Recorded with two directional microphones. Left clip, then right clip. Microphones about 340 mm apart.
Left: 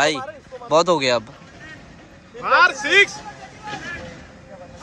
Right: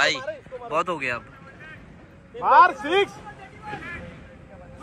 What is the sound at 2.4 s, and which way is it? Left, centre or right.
Speech, centre.